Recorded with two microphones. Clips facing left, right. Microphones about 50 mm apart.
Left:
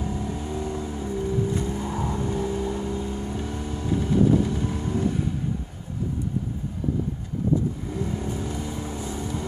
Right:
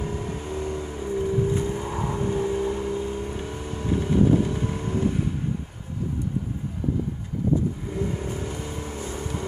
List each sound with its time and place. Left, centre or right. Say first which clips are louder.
0.0 s vehicle: left 1 dB; right
7.9 s vehicle: even; right